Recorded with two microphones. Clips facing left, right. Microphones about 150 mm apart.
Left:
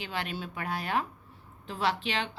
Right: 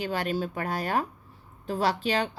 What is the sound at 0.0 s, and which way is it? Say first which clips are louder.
Speech: right 7 dB; 40° right (ahead or behind).